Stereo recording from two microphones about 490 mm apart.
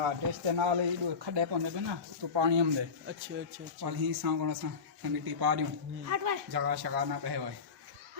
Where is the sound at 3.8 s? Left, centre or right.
Right.